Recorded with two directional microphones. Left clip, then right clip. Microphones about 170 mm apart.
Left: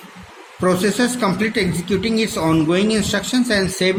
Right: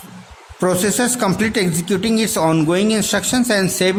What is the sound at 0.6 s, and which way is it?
Speech, 55° right (ahead or behind).